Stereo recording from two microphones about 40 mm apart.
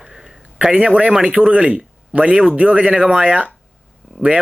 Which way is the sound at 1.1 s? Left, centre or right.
Centre.